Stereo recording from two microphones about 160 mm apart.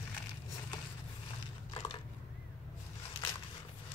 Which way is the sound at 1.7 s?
30° left (ahead or behind).